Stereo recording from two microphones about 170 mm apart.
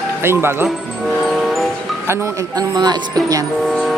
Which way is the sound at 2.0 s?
15° right (ahead or behind).